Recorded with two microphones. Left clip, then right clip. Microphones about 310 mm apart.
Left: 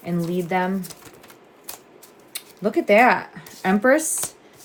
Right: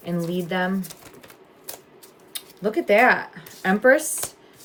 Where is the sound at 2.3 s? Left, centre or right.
Centre.